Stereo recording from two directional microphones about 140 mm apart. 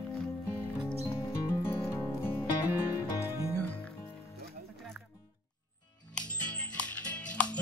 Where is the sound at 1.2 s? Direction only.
20° left (ahead or behind).